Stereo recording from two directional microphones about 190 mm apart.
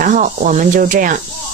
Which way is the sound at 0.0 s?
45° right (ahead or behind).